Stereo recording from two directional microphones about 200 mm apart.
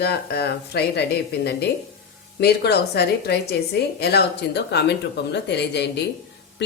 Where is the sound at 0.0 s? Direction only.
55° left (ahead or behind).